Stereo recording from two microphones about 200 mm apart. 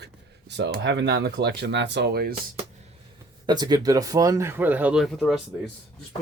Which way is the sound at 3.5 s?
20° right (ahead or behind).